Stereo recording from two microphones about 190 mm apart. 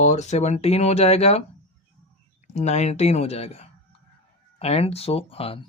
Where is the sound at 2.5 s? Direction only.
35° left (ahead or behind).